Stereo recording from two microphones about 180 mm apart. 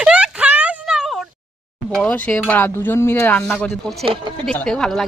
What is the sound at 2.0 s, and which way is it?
Speech, 5° left (ahead or behind).